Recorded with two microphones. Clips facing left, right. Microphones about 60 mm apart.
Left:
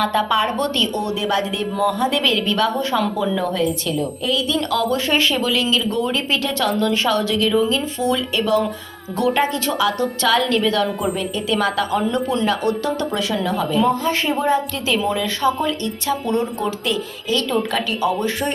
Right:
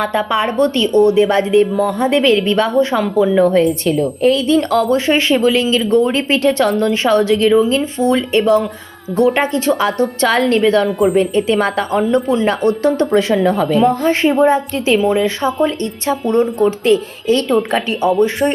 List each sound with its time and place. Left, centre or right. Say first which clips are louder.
0.0 s a woman's voice: right 2 dB; right
3.3 s a woman's voice: right 9 dB; right
10.3 s a woman's voice: right 5 dB; right
11.2 s a woman's voice: right 7 dB; right